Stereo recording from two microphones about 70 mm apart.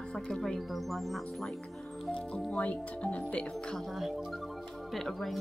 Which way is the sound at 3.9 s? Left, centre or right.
Centre.